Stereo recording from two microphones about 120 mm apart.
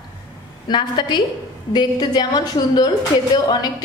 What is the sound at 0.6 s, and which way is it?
A woman's voice, 40° left (ahead or behind).